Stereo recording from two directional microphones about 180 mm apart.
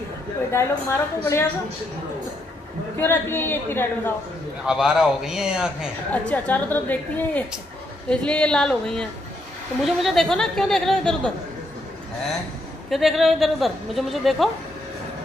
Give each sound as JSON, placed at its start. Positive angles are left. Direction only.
{"t": 0.5, "sound": "a woman's voice", "side_deg": 15}
{"t": 3.0, "sound": "a woman's voice", "side_deg": 10}
{"t": 4.6, "sound": "a woman's voice", "side_deg": -5}
{"t": 6.1, "sound": "a woman's voice", "side_deg": 10}
{"t": 12.9, "sound": "a woman's voice", "side_deg": 0}